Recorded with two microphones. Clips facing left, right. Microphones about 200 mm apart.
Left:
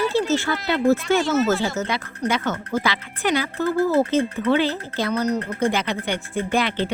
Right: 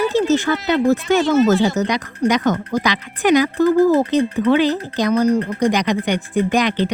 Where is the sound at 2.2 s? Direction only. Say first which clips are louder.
Right 7 dB; 15° right (ahead or behind).